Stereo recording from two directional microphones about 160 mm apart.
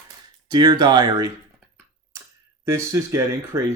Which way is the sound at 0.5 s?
25° right (ahead or behind).